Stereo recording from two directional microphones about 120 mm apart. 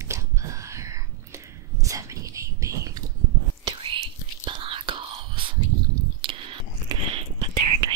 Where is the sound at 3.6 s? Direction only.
45° right (ahead or behind).